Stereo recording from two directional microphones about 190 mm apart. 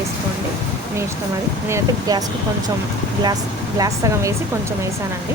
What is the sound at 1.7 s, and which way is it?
Speech, 20° right (ahead or behind).